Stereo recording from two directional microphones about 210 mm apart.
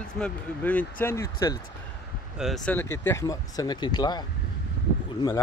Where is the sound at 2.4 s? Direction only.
Centre (ahead or behind); by 4.2 s 20° left (ahead or behind).